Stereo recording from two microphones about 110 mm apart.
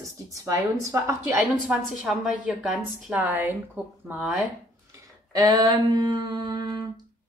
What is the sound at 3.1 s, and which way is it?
Speech, 15° right (ahead or behind).